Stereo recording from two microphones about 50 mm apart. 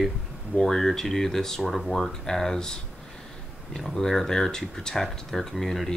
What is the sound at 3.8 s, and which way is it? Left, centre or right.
Speech, centre.